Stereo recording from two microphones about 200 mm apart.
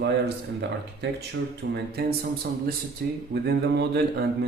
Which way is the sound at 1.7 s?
50° right (ahead or behind).